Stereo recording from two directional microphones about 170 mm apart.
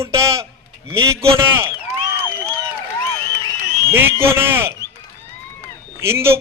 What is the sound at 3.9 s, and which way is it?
Speech, 15° right (ahead or behind).